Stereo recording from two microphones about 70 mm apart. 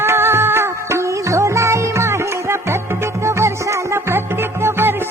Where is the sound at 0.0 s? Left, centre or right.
Right.